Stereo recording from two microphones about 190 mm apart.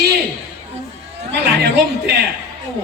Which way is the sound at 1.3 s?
60° right (ahead or behind).